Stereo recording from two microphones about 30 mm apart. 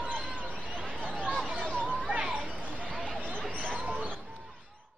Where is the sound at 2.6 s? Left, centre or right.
Right.